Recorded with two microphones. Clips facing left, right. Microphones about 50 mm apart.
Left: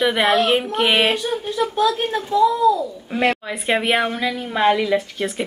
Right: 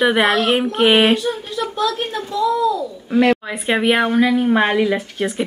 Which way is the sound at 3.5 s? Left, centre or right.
Centre.